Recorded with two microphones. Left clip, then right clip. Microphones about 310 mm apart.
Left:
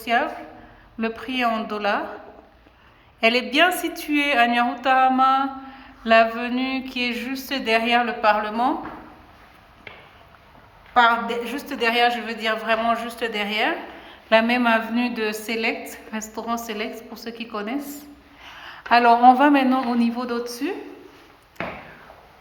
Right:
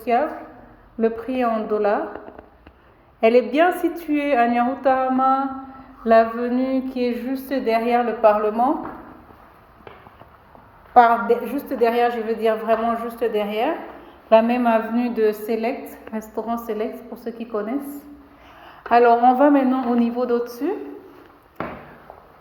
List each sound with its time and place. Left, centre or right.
0.0 s a woman's voice: centre
3.2 s a woman's voice: centre
10.9 s a woman's voice: centre